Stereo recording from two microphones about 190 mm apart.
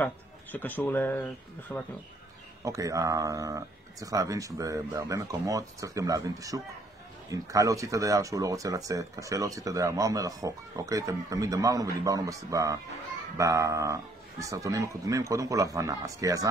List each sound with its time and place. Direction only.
0.0 s speech: 10° left (ahead or behind)
2.6 s speech: 15° right (ahead or behind)